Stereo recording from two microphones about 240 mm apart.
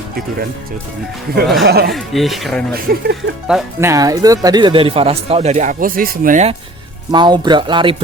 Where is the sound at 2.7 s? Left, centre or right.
Right.